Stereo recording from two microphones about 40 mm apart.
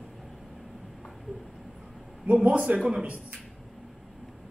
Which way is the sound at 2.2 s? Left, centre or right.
Right.